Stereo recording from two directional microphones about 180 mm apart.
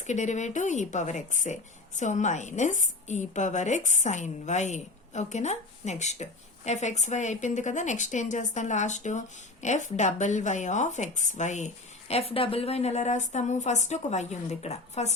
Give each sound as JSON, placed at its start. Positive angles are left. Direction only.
{"t": 0.1, "sound": "a woman's voice", "side_deg": 40}